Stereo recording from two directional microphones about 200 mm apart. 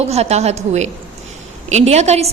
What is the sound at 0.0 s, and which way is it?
A woman's voice, 30° right (ahead or behind).